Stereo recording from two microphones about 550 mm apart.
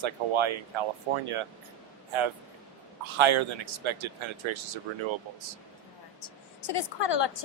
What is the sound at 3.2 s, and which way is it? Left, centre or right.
Speech, right.